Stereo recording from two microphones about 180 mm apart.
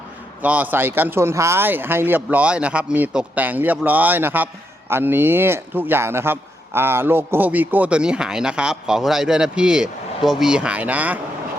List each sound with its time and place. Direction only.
0.4 s a man's voice: 10° right (ahead or behind)